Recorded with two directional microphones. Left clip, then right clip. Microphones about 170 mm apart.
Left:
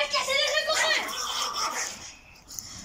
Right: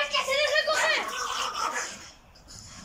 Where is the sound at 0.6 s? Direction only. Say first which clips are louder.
Even; 5° right (ahead or behind).